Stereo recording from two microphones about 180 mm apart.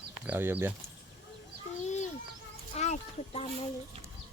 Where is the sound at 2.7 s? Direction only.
40° left (ahead or behind).